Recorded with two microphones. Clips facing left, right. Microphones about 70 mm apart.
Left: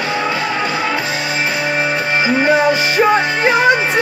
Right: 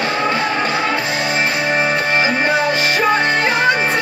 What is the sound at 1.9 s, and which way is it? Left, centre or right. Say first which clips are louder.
Music: left 1 dB; centre.